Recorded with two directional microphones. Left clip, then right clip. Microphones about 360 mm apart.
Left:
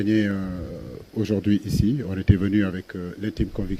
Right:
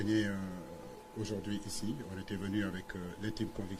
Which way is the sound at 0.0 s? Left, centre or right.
Left.